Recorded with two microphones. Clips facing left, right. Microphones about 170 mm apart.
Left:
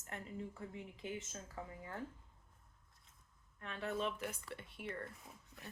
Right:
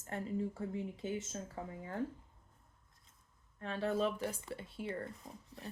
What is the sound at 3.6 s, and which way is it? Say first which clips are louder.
A woman's voice: right 6 dB; 35° right (ahead or behind).